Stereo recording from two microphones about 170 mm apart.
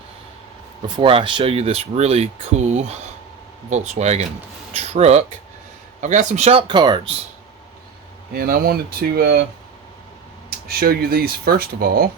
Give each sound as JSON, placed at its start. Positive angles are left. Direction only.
{"t": 0.9, "sound": "speech", "side_deg": -30}
{"t": 8.3, "sound": "speech", "side_deg": -65}
{"t": 10.7, "sound": "speech", "side_deg": -65}